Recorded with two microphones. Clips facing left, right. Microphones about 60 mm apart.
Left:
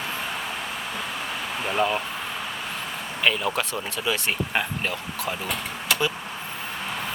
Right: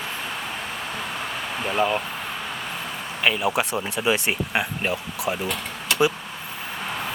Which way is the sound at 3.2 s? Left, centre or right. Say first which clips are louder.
Right 2 dB; centre.